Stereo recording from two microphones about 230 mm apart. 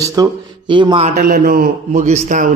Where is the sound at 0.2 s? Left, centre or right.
Centre.